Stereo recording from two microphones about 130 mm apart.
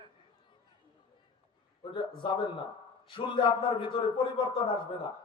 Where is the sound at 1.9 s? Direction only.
40° left (ahead or behind).